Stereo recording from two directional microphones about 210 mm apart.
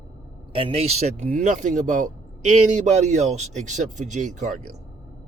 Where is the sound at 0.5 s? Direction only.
25° right (ahead or behind).